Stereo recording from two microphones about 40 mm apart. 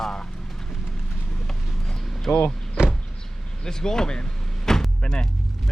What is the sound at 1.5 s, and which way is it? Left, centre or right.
Vehicle, centre.